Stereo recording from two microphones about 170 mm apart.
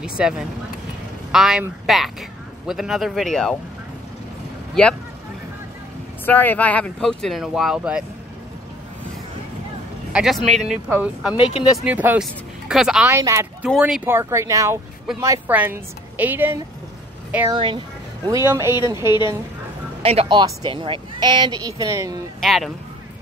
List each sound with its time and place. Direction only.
0.0 s speech: 5° right (ahead or behind)
6.2 s speech: 10° left (ahead or behind)
10.1 s a woman's voice: centre (ahead or behind)
11.3 s speech: 35° left (ahead or behind)
11.8 s a woman's voice: 10° right (ahead or behind)
13.1 s a woman's voice: 15° right (ahead or behind)
17.5 s speech: 30° right (ahead or behind)
20.0 s speech: 35° right (ahead or behind); by 22.1 s 20° right (ahead or behind)
22.4 s speech: centre (ahead or behind)